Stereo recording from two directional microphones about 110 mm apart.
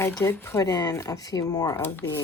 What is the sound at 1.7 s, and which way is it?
Speech, 20° left (ahead or behind).